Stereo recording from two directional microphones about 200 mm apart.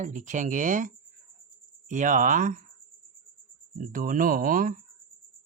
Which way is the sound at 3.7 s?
45° right (ahead or behind).